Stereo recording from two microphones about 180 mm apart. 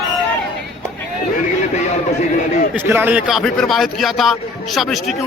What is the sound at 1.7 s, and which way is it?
Speech, 40° left (ahead or behind).